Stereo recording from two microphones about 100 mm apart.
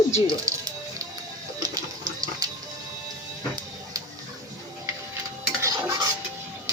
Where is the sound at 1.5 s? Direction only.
40° right (ahead or behind).